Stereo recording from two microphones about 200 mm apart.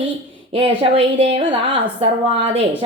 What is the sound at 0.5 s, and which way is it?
A woman's voice, 30° right (ahead or behind).